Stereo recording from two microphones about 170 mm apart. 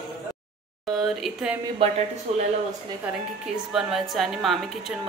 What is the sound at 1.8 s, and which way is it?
Speech, 30° right (ahead or behind).